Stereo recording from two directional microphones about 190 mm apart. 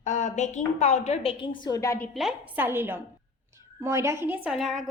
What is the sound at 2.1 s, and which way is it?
A woman's voice, 5° right (ahead or behind).